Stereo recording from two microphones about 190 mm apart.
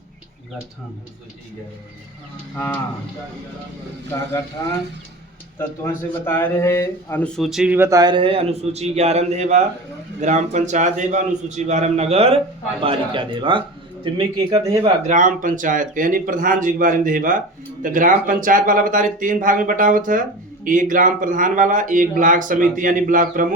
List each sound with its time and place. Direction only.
2.6 s speech: 10° left (ahead or behind)
4.1 s speech: 15° left (ahead or behind)
5.5 s a man's voice: 10° left (ahead or behind); by 14.9 s 25° right (ahead or behind)
15.0 s speech: 40° right (ahead or behind)